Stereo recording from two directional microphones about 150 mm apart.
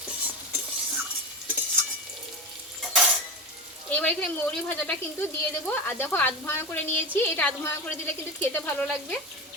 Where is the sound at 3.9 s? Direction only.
10° left (ahead or behind).